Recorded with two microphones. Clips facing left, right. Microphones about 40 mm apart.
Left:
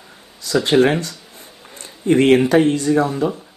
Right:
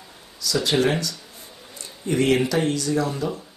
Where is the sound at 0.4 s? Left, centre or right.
Left.